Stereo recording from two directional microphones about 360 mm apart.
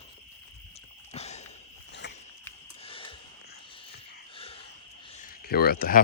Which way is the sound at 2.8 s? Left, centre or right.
Centre.